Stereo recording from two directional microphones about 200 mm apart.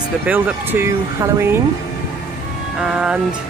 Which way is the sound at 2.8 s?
5° right (ahead or behind).